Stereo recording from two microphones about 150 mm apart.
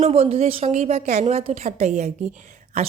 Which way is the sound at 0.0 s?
40° right (ahead or behind).